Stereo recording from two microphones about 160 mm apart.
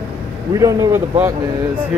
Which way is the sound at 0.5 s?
20° right (ahead or behind).